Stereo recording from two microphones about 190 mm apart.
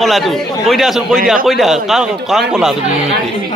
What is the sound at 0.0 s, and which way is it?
A man's voice, centre (ahead or behind).